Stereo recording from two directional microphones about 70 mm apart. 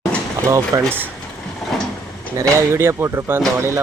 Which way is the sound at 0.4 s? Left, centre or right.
Right.